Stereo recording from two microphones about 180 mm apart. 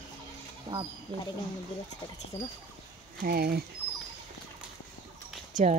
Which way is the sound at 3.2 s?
55° right (ahead or behind).